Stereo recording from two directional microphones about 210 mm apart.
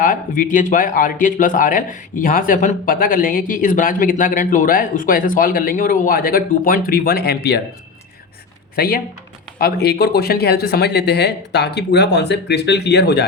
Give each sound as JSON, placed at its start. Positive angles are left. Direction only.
{"t": 0.0, "sound": "speech", "side_deg": 40}
{"t": 8.7, "sound": "speech", "side_deg": 45}